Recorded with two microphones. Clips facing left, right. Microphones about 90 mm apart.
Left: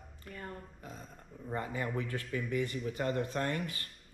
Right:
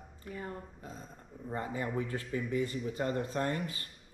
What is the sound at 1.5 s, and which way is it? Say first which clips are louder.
Speech: right 1 dB; 30° right (ahead or behind).